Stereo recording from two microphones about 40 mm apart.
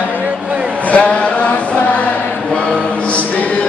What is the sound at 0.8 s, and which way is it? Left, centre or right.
Chant, left.